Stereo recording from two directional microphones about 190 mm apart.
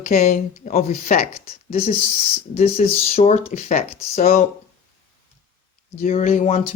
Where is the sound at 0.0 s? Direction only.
40° left (ahead or behind).